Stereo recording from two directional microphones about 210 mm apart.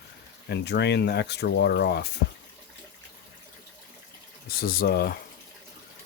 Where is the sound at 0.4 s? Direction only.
55° left (ahead or behind).